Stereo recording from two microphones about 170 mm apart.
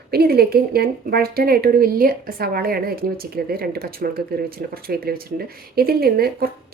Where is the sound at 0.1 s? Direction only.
65° right (ahead or behind).